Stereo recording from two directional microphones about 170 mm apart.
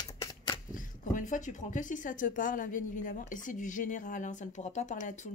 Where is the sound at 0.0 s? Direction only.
25° left (ahead or behind).